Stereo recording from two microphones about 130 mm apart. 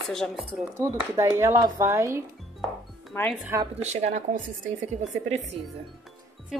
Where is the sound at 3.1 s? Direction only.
15° left (ahead or behind).